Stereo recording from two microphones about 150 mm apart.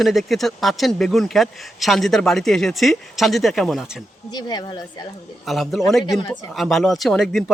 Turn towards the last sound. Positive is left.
turn(degrees=5)  # may be behind; listen again after turning